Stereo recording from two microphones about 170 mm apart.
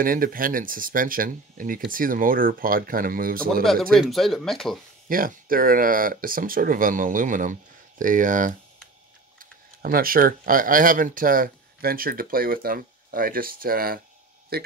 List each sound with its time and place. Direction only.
0.0 s speech: 55° right (ahead or behind)
3.6 s speech: centre (ahead or behind)
5.0 s speech: 55° right (ahead or behind)